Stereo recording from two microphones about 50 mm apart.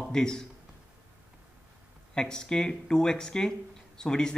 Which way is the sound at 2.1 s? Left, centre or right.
Centre.